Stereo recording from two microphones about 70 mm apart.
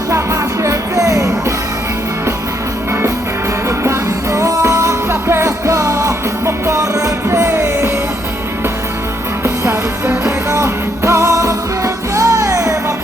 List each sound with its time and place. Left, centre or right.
0.1 s music: right
3.7 s music: right
9.4 s music: right